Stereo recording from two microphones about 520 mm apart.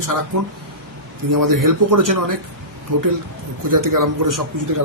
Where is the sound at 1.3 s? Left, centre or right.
Right.